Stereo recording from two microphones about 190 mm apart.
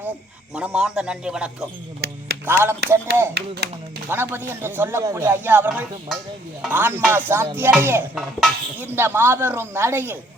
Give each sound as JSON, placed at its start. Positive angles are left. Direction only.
{"t": 0.5, "sound": "a man's voice", "side_deg": -5}
{"t": 2.0, "sound": "music", "side_deg": -60}
{"t": 2.5, "sound": "speech", "side_deg": -10}
{"t": 3.3, "sound": "speech", "side_deg": -60}
{"t": 4.1, "sound": "speech", "side_deg": -10}